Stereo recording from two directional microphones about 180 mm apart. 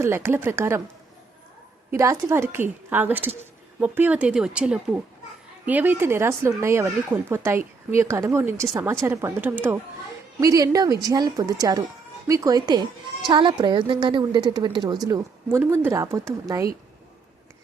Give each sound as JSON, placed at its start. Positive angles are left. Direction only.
{"t": 0.0, "sound": "speech", "side_deg": -15}
{"t": 1.9, "sound": "a woman's voice", "side_deg": -15}